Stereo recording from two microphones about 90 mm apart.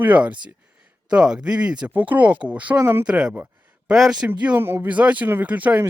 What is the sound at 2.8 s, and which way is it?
Speech, 25° right (ahead or behind).